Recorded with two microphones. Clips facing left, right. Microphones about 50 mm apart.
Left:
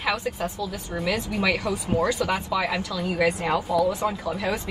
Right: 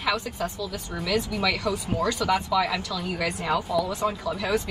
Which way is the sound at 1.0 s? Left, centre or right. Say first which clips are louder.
Left 1 dB; left.